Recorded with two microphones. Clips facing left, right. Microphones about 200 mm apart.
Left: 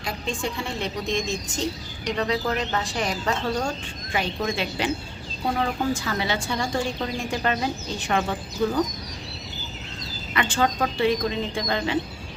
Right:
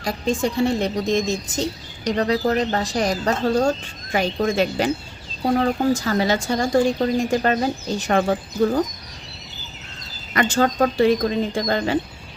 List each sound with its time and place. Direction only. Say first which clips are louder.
0.0 s a woman's voice: right 7 dB; 40° right (ahead or behind)
10.3 s a woman's voice: right 5 dB; 40° right (ahead or behind)